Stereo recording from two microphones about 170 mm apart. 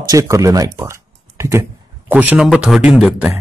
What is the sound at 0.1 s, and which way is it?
A man's voice, 20° right (ahead or behind).